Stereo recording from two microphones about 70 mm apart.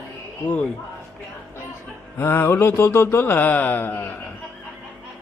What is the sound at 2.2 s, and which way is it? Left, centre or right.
Mantra, left.